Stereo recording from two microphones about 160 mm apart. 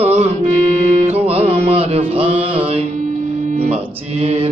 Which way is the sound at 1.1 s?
40° right (ahead or behind).